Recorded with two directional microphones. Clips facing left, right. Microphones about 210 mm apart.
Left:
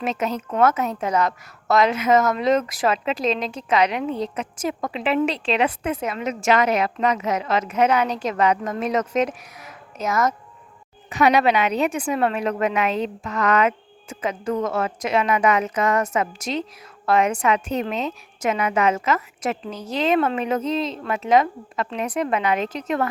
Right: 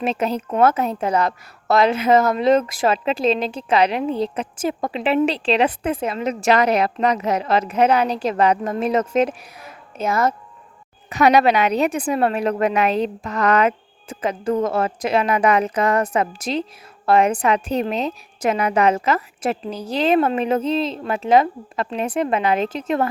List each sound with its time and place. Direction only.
0.0 s a woman's voice: 30° right (ahead or behind)